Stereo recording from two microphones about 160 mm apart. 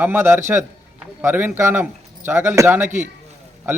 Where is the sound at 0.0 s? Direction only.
15° right (ahead or behind).